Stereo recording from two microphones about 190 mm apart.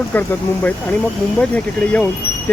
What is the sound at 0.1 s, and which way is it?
Speech, 10° left (ahead or behind).